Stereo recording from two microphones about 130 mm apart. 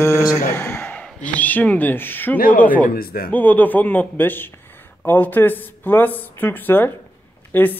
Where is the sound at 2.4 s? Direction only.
90° left.